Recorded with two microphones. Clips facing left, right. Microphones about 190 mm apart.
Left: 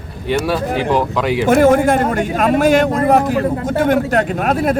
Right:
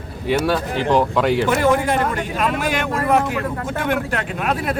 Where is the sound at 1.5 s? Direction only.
45° left (ahead or behind).